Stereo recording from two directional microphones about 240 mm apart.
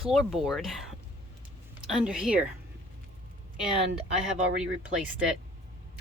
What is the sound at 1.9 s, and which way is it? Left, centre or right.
Speech, centre.